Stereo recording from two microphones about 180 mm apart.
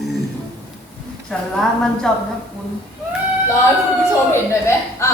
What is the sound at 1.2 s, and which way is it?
Speech, centre (ahead or behind).